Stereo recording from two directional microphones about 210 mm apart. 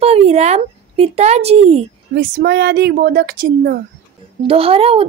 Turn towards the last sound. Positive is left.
turn(degrees=-25)  # may be behind; listen again after turning